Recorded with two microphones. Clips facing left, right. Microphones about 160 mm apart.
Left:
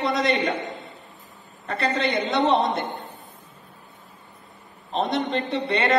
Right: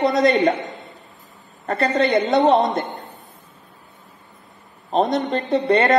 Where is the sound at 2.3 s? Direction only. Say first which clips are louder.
Right 5 dB; 45° right (ahead or behind).